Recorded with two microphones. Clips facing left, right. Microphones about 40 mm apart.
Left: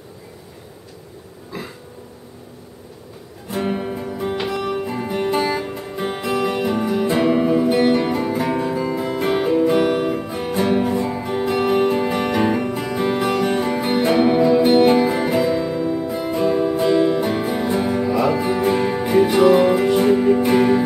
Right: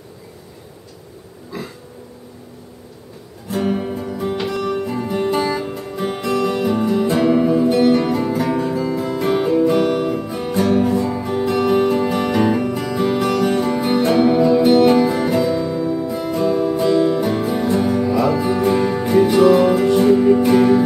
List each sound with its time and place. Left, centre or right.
3.4 s music: centre